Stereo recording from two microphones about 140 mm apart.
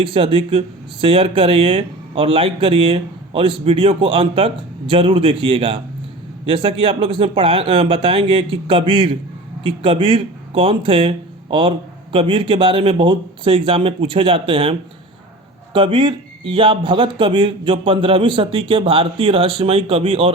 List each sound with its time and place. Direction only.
0.0 s speech: 40° right (ahead or behind)